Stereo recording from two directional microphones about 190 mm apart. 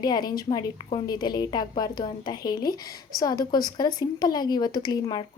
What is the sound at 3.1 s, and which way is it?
A woman's voice, 20° left (ahead or behind).